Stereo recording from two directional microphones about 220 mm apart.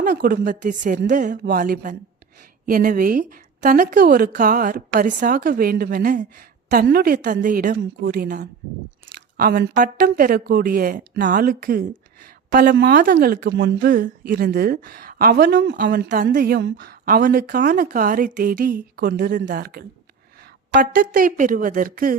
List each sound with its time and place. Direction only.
0.0 s a woman's voice: 40° right (ahead or behind)